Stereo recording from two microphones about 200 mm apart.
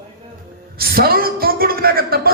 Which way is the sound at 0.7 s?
50° right (ahead or behind).